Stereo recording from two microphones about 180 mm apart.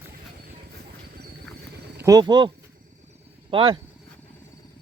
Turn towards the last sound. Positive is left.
turn(degrees=-30)  # may be behind; listen again after turning